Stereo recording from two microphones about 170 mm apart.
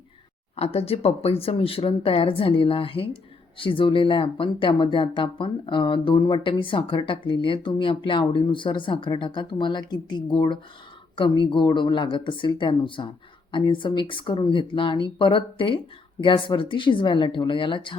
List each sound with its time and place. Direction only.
0.5 s speech: 35° left (ahead or behind)